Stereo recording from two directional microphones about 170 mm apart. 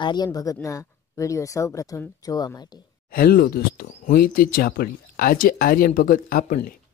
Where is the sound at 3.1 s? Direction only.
65° left (ahead or behind).